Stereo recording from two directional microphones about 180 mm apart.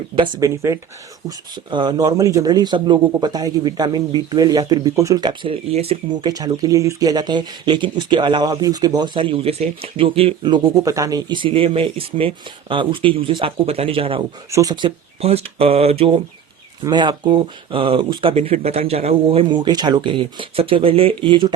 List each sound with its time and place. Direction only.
0.2 s speech: 20° right (ahead or behind)
6.3 s speech: 20° right (ahead or behind)